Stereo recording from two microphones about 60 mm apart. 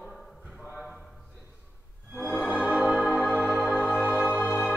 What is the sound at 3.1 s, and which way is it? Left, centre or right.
Music, left.